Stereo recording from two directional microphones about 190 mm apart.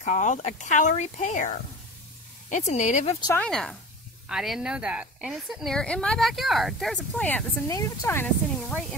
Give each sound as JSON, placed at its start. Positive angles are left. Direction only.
{"t": 0.0, "sound": "speech", "side_deg": 40}
{"t": 3.3, "sound": "a woman's voice", "side_deg": 5}